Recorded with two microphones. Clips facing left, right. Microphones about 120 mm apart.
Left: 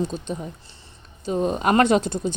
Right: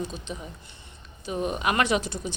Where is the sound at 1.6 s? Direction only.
40° left (ahead or behind).